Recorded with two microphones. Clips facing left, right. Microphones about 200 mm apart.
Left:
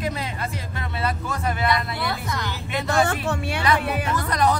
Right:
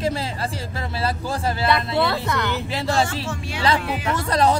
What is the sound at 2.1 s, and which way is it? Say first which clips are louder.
Speech: right 5 dB; 65° right (ahead or behind).